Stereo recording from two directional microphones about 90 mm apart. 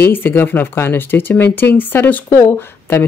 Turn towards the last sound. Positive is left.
turn(degrees=25)  # may be behind; listen again after turning